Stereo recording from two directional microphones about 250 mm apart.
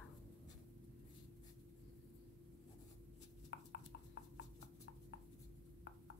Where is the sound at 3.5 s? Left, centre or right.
Left.